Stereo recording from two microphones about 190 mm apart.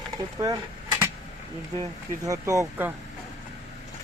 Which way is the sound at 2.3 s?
15° right (ahead or behind).